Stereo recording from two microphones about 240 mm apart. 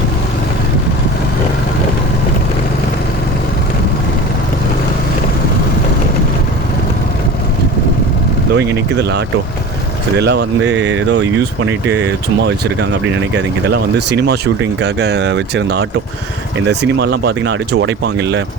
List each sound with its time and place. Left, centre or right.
8.5 s speech: right